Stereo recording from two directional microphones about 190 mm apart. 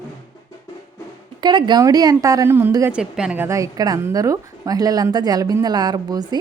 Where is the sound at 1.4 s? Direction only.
25° right (ahead or behind).